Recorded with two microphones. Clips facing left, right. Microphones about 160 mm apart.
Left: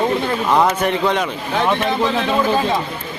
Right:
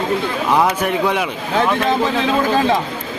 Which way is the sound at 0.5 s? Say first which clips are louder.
Even; 10° right (ahead or behind).